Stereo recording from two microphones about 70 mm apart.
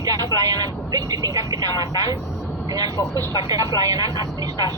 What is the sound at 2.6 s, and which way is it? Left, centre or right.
Speech, right.